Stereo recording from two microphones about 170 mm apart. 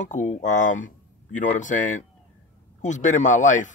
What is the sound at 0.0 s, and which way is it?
A man's voice, 45° left (ahead or behind).